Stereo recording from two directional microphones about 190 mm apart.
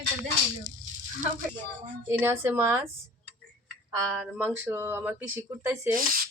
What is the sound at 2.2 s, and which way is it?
Speech, 10° right (ahead or behind).